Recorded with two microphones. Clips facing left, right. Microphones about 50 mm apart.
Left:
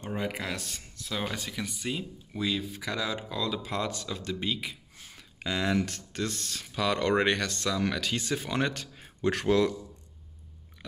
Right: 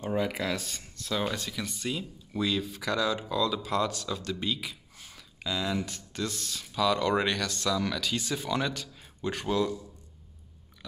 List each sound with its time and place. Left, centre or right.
0.6 s speech: centre
1.3 s speech: centre
5.4 s speech: left
6.1 s speech: left
9.2 s speech: left